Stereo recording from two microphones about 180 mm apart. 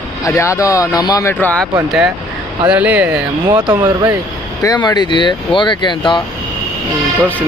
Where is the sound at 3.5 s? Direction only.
20° right (ahead or behind).